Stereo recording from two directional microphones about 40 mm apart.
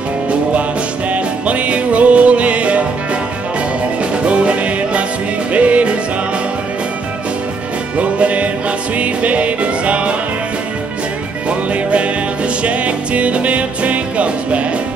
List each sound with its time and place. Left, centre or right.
1.1 s music: right
4.3 s music: right
8.0 s music: right
11.7 s music: right